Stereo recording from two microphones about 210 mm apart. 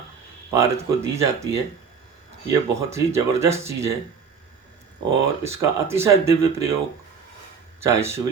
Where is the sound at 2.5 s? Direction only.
15° right (ahead or behind).